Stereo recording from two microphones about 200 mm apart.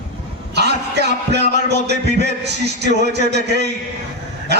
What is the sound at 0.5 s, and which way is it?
A man's voice, 55° right (ahead or behind).